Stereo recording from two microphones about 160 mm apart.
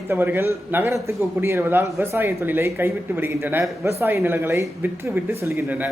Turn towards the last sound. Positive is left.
turn(degrees=-10)  # may be behind; listen again after turning